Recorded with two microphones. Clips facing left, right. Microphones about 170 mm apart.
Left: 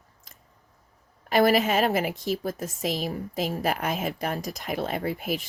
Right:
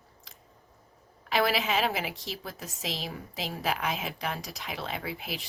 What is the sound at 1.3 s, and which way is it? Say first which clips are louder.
A woman's voice: left 6 dB; 50° left (ahead or behind).